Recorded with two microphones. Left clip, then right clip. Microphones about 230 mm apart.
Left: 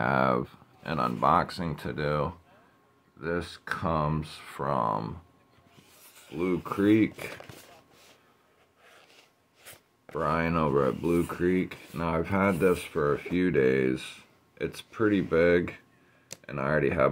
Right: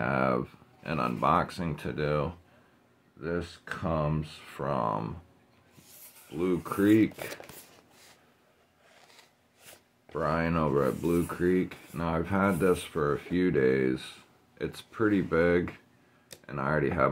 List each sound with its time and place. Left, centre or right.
0.0 s speech: centre
6.3 s speech: centre
10.1 s speech: centre